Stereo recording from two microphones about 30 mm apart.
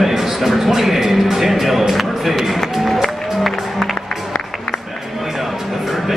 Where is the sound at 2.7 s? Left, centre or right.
Centre.